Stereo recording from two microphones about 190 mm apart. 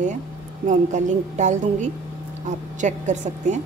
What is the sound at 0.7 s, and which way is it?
A woman's voice, 40° right (ahead or behind).